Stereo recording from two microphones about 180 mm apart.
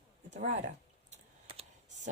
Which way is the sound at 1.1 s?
35° right (ahead or behind).